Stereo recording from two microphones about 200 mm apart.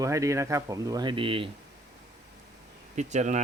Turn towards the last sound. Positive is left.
turn(degrees=-35)  # may be behind; listen again after turning